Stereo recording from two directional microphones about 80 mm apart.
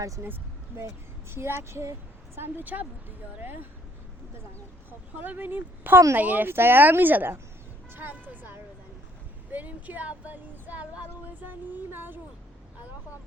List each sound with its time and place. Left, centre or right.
1.3 s speech: right
4.9 s speech: right